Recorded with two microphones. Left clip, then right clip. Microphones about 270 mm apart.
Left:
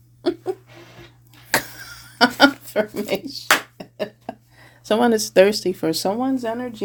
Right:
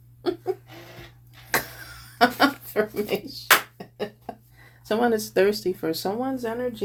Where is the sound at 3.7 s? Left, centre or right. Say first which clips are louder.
Left 4 dB; left.